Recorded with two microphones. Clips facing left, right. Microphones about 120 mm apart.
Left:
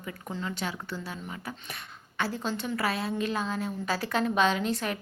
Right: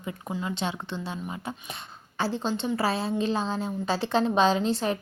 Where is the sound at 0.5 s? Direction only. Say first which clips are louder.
Right 3 dB; 25° right (ahead or behind).